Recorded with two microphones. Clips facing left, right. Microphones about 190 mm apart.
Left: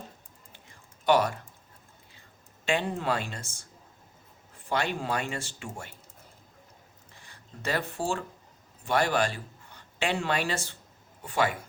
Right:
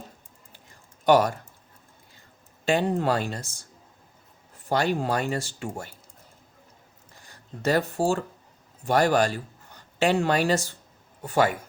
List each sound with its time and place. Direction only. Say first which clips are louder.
1.0 s speech: right 4 dB; 40° right (ahead or behind)
2.6 s speech: right 5 dB; 40° right (ahead or behind)
4.7 s speech: right 5 dB; 40° right (ahead or behind)
7.2 s a man's voice: right 6 dB; 40° right (ahead or behind)